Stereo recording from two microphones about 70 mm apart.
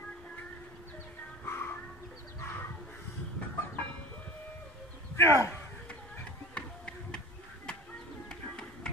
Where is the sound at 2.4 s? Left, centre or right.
Left.